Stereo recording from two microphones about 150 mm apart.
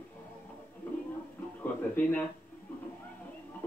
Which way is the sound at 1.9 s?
10° left (ahead or behind).